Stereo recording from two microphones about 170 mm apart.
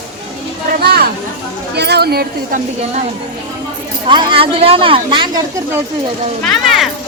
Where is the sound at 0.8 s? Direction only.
70° right (ahead or behind).